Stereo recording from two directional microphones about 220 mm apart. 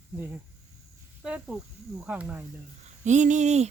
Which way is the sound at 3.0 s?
35° right (ahead or behind).